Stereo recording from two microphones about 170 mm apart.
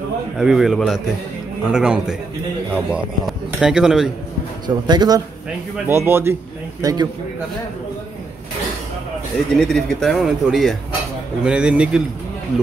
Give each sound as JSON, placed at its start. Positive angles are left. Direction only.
{"t": 0.4, "sound": "speech", "side_deg": -5}
{"t": 4.6, "sound": "speech", "side_deg": -25}
{"t": 5.9, "sound": "a man's voice", "side_deg": -15}
{"t": 9.6, "sound": "speech", "side_deg": 0}